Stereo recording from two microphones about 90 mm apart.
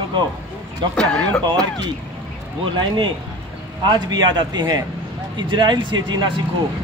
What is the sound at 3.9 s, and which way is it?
A man's voice, 50° right (ahead or behind).